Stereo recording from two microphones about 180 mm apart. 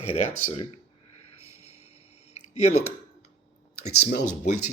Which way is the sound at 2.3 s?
40° left (ahead or behind).